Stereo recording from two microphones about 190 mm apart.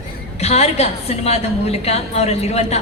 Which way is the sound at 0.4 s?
35° left (ahead or behind).